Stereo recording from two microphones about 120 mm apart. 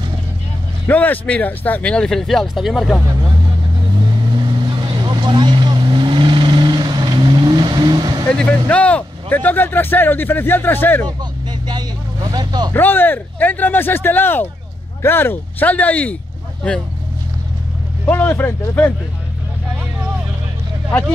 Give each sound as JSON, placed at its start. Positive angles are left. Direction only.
{"t": 0.8, "sound": "speech", "side_deg": 15}
{"t": 4.1, "sound": "vehicle", "side_deg": -40}
{"t": 8.4, "sound": "speech", "side_deg": 10}
{"t": 11.6, "sound": "vehicle", "side_deg": -35}
{"t": 12.7, "sound": "speech", "side_deg": 15}
{"t": 18.0, "sound": "speech", "side_deg": 15}